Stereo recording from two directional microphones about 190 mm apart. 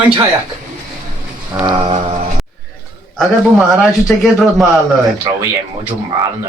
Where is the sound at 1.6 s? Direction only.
30° right (ahead or behind).